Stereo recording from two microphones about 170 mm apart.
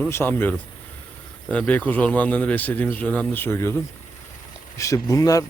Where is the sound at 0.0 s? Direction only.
10° left (ahead or behind).